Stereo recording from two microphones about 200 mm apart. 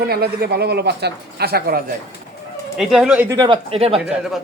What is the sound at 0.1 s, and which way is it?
A man's voice, 50° right (ahead or behind).